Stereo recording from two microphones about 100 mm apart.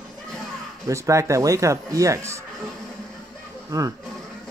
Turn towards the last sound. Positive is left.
turn(degrees=-35)  # may be behind; listen again after turning